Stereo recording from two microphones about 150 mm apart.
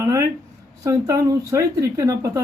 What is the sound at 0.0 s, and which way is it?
Speech, 20° right (ahead or behind).